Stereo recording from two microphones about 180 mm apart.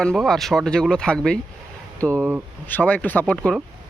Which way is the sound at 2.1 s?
10° right (ahead or behind).